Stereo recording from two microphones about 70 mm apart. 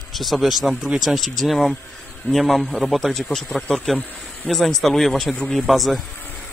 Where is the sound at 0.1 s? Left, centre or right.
Centre.